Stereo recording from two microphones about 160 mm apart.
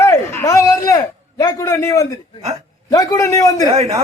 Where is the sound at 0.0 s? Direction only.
20° left (ahead or behind).